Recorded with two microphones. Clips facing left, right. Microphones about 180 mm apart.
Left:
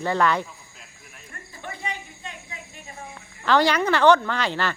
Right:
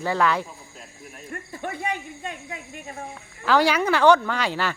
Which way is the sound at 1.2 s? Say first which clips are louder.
Right 6 dB; 50° right (ahead or behind).